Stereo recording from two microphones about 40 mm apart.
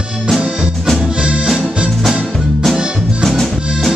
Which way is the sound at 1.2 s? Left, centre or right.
Right.